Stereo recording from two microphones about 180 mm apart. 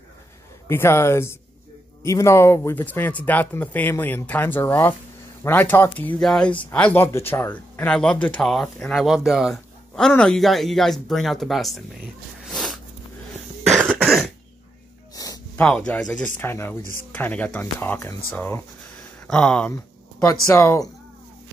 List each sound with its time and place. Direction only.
0.7 s speech: 15° left (ahead or behind)
12.4 s a sound: centre (ahead or behind)
13.7 s cough: 10° right (ahead or behind)
14.0 s cough: centre (ahead or behind)
15.1 s a sound: 20° left (ahead or behind)
15.5 s speech: 5° left (ahead or behind)
20.2 s speech: 15° left (ahead or behind)